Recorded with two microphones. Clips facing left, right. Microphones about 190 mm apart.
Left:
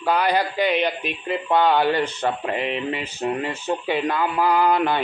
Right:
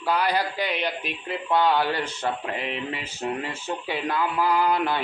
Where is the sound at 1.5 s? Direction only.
60° left (ahead or behind).